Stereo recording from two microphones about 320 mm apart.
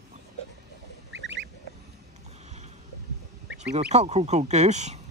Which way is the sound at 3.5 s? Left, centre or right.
Right.